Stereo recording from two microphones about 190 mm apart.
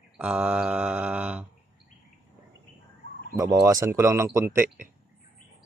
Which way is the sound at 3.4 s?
20° right (ahead or behind).